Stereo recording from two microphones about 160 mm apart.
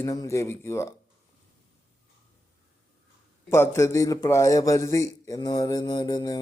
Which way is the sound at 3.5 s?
15° left (ahead or behind).